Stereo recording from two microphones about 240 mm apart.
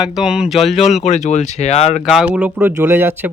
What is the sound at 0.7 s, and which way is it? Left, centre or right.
Speech, left.